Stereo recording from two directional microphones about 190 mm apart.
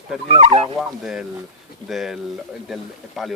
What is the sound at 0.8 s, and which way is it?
Speech, centre (ahead or behind).